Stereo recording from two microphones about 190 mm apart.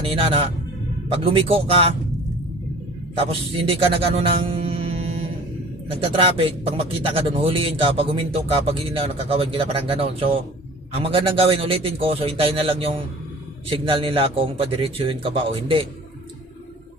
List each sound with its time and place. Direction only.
0.1 s speech: 30° right (ahead or behind)
3.2 s a man's voice: 30° right (ahead or behind)
6.1 s speech: 30° right (ahead or behind)